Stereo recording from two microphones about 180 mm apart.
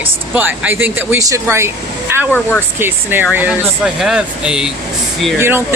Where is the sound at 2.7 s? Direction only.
10° right (ahead or behind).